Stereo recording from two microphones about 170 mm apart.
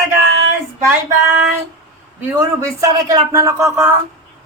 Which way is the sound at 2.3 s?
15° right (ahead or behind).